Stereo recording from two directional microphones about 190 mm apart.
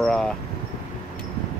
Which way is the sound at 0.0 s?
Centre (ahead or behind).